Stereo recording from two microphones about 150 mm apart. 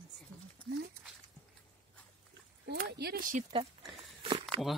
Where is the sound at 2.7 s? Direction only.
80° right.